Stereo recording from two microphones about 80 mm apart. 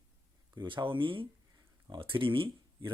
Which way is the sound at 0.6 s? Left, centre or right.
Right.